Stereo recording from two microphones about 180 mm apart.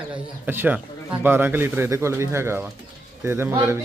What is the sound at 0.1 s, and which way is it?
Speech, 10° right (ahead or behind).